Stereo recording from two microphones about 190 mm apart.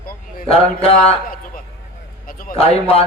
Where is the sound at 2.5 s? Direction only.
30° left (ahead or behind).